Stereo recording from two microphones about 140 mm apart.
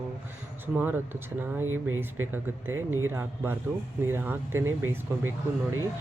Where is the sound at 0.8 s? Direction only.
15° right (ahead or behind).